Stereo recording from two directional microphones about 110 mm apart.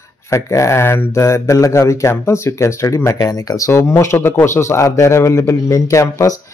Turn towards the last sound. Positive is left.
turn(degrees=30)  # may be behind; listen again after turning